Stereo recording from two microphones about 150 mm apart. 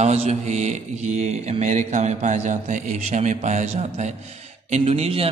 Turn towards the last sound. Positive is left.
turn(degrees=-40)  # may be behind; listen again after turning